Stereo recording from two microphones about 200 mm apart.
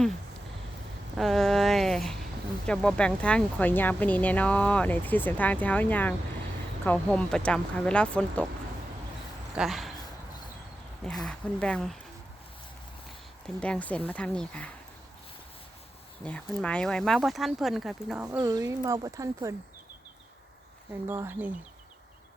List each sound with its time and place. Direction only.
1.1 s a sound: centre (ahead or behind)
2.6 s speech: 5° left (ahead or behind)
9.6 s speech: centre (ahead or behind)
11.0 s speech: centre (ahead or behind)
13.6 s speech: 5° left (ahead or behind)
16.2 s speech: 5° left (ahead or behind)
18.3 s speech: 20° right (ahead or behind)
21.1 s speech: 10° right (ahead or behind)